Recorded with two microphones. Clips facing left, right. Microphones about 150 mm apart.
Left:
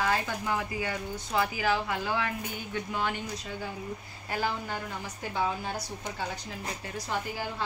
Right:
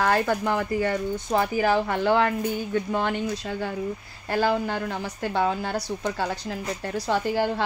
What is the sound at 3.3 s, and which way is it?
Speech, 80° right.